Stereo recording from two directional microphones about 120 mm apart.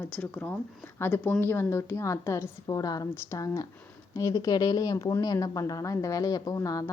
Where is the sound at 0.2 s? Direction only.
15° left (ahead or behind).